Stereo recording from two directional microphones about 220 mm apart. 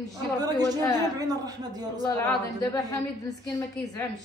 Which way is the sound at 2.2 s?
15° left (ahead or behind).